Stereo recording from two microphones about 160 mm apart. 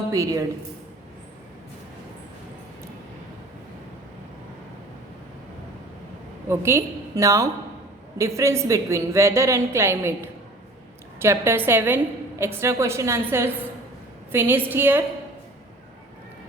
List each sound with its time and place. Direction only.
0.1 s a woman's voice: 20° right (ahead or behind)
6.5 s a woman's voice: 15° right (ahead or behind)